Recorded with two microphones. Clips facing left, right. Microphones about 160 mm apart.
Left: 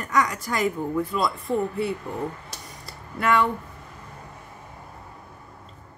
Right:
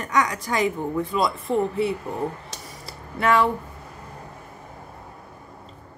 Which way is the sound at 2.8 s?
Centre (ahead or behind).